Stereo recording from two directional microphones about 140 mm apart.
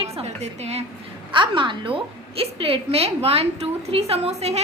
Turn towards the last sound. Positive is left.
turn(degrees=-45)  # may be behind; listen again after turning